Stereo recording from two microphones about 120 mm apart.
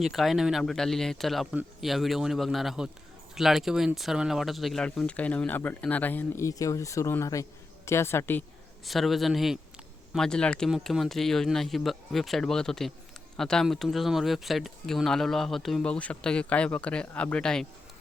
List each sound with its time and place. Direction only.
0.0 s a woman's voice: centre (ahead or behind); by 8.4 s 20° left (ahead or behind)
8.8 s speech: centre (ahead or behind)